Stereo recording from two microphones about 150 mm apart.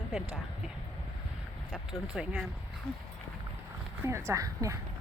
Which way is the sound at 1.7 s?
Centre (ahead or behind).